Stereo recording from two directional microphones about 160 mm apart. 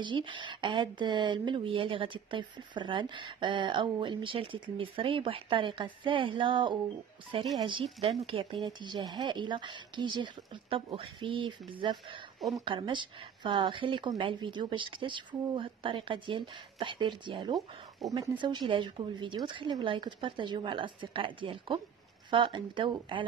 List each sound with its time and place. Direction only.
0.0 s speech: 30° right (ahead or behind)